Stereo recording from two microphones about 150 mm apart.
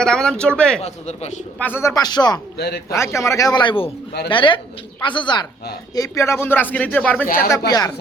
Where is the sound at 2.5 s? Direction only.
90° left.